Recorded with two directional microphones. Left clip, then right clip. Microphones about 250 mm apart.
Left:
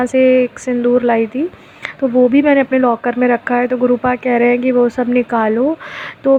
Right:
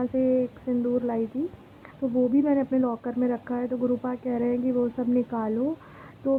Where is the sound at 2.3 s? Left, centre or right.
Left.